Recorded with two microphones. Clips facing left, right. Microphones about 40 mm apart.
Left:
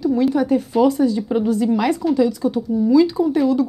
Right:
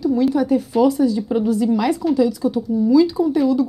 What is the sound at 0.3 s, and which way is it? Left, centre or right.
A woman's voice, left.